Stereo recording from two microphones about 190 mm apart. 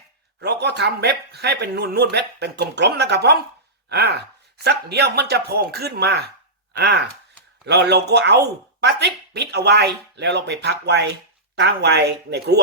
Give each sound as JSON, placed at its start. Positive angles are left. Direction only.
{"t": 0.3, "sound": "speech", "side_deg": -60}